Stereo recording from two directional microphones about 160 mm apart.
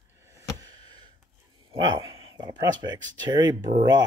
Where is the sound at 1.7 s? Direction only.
30° right (ahead or behind).